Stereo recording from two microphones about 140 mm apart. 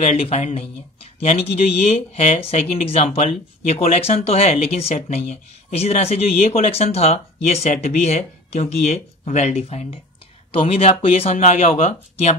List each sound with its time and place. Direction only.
0.0 s speech: 55° left (ahead or behind)